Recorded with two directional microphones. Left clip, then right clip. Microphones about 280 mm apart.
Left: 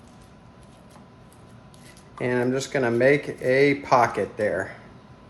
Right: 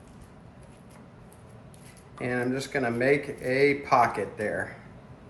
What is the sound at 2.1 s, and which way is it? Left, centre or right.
Speech, left.